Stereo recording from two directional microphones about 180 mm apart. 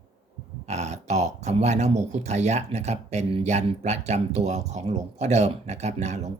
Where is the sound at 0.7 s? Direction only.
40° right (ahead or behind).